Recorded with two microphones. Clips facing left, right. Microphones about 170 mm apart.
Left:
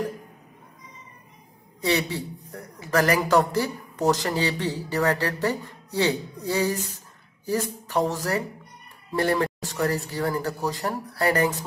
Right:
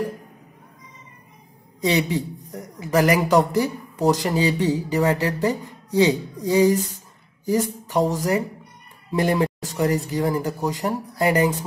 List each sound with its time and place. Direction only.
1.8 s speech: 15° right (ahead or behind)